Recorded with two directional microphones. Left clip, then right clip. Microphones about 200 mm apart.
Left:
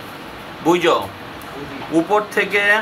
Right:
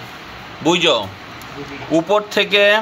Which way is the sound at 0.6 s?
50° right (ahead or behind).